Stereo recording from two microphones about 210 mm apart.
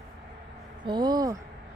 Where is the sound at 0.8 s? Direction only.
20° right (ahead or behind).